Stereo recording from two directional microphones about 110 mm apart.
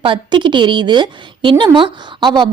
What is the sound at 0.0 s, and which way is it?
A woman's voice, 50° right (ahead or behind).